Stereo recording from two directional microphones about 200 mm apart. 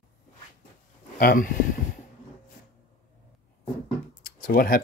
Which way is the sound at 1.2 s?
45° left (ahead or behind).